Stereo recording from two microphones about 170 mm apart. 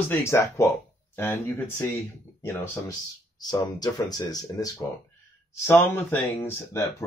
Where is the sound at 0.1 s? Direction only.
15° left (ahead or behind).